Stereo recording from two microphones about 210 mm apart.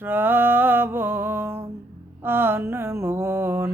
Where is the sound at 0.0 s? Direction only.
10° right (ahead or behind).